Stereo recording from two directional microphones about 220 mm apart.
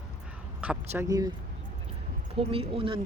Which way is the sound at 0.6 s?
5° right (ahead or behind).